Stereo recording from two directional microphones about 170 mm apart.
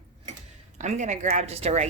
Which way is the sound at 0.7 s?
45° right (ahead or behind).